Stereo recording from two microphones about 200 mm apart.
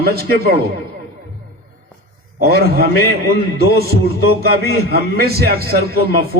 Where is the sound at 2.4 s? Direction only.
50° right (ahead or behind).